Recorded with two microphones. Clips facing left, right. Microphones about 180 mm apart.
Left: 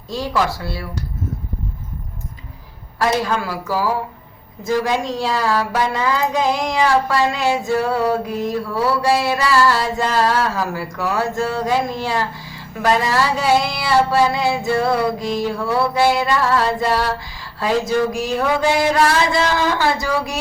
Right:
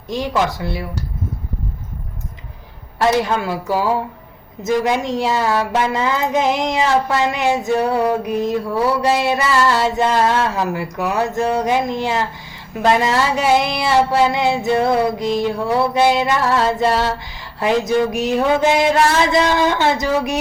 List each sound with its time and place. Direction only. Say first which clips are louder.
0.1 s speech: right 1 dB; 20° right (ahead or behind)
3.0 s speech: right 2 dB; 25° right (ahead or behind)